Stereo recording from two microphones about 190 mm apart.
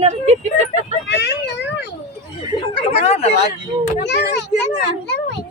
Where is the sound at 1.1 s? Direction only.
65° left (ahead or behind).